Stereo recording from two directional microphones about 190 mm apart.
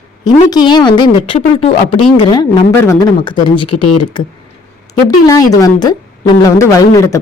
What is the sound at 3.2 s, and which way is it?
A woman's voice, 25° left (ahead or behind).